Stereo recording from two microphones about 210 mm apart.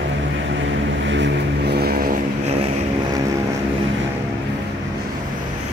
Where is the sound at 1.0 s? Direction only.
60° right (ahead or behind).